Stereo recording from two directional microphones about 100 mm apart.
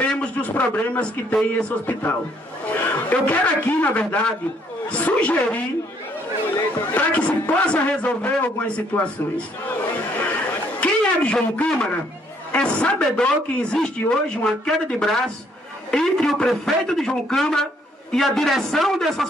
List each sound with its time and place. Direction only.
0.1 s a man's voice: 10° left (ahead or behind)
10.8 s a sound: 10° left (ahead or behind)
12.5 s a man's voice: 10° left (ahead or behind)